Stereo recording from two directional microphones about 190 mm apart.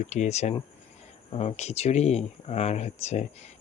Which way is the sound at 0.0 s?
40° left (ahead or behind).